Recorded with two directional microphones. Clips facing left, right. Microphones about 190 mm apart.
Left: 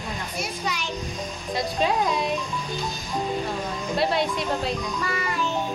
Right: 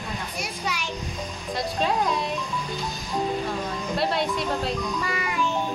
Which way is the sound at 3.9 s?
Centre (ahead or behind).